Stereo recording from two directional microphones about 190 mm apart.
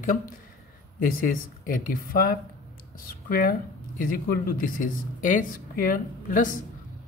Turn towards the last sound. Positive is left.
turn(degrees=45)  # may be behind; listen again after turning